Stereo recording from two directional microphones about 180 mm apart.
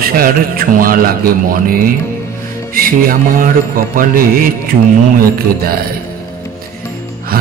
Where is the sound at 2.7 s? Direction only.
50° right (ahead or behind).